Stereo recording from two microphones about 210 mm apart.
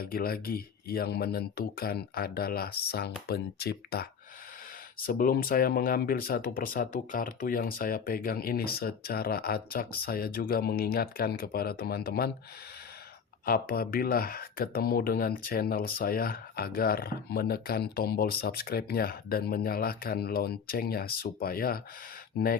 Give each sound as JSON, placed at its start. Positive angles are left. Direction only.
{"t": 0.0, "sound": "speech", "side_deg": 45}
{"t": 13.4, "sound": "speech", "side_deg": 45}